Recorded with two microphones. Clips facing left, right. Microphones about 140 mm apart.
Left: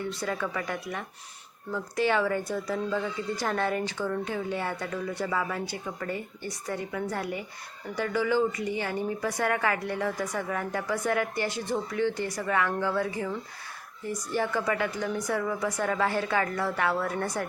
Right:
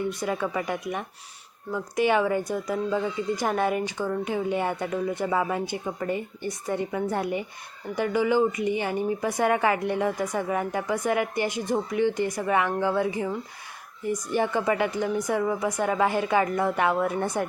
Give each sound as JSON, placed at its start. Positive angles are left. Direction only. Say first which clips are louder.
{"t": 0.2, "sound": "a woman's voice", "louder": "right 4 dB", "side_deg": -20}